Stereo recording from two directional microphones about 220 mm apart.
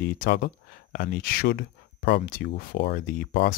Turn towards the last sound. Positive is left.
turn(degrees=40)  # may be behind; listen again after turning